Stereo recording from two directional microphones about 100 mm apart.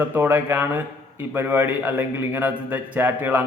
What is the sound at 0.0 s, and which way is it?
A man's voice, 20° right (ahead or behind).